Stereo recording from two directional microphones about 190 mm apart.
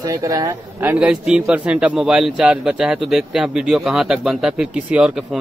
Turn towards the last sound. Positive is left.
turn(degrees=-5)  # may be behind; listen again after turning